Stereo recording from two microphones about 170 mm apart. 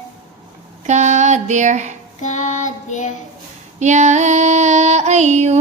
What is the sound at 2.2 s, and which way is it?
Child singing, 45° left (ahead or behind).